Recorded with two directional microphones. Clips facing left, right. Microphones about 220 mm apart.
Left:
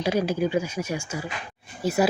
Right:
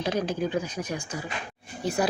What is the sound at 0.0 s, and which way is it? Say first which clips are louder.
Speech: left 4 dB; 10° left (ahead or behind).